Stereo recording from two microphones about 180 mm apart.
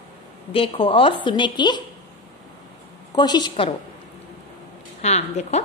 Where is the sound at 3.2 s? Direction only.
25° left (ahead or behind).